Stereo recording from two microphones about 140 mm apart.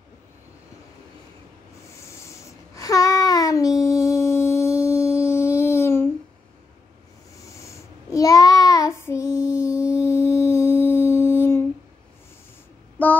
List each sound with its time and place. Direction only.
2.0 s a sound: 20° left (ahead or behind)
7.3 s child singing: 20° left (ahead or behind)
10.0 s music: 20° left (ahead or behind)
13.0 s female singing: 10° left (ahead or behind)